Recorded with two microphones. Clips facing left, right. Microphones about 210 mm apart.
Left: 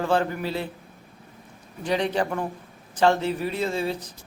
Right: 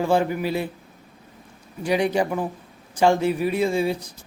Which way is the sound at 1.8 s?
10° right (ahead or behind).